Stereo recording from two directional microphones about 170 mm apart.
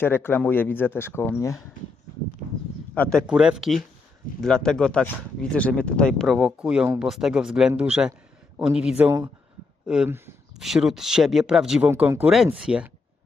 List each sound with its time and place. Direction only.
0.0 s speech: 10° left (ahead or behind)
2.9 s speech: 5° left (ahead or behind); by 7.1 s 10° right (ahead or behind)
7.1 s speech: centre (ahead or behind)
11.9 s speech: 15° right (ahead or behind)